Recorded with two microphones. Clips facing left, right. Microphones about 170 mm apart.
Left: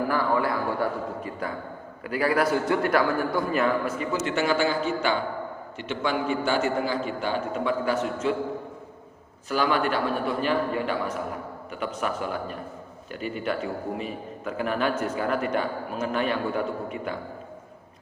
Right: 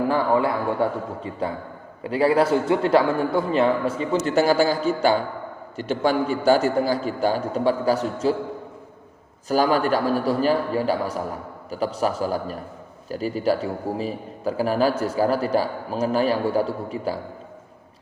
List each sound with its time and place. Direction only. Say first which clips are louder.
0.1 s a sound: right 4 dB; 25° right (ahead or behind)
2.0 s a man's voice: right 5 dB; 30° right (ahead or behind)
9.5 s a man's voice: right 5 dB; 40° right (ahead or behind)